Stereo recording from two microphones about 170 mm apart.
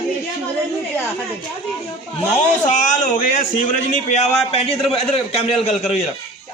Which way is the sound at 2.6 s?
50° left (ahead or behind).